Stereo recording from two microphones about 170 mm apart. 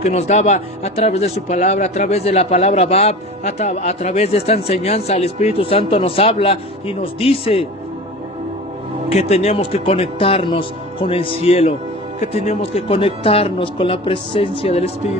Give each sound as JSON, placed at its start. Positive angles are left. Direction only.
{"t": 0.0, "sound": "speech", "side_deg": 40}
{"t": 9.0, "sound": "speech", "side_deg": 40}